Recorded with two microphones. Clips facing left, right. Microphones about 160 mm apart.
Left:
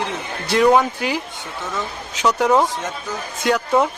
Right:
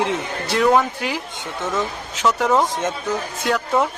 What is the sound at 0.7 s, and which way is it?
A man's voice, centre (ahead or behind).